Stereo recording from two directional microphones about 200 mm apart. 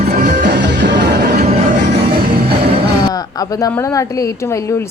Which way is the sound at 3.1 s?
20° left (ahead or behind).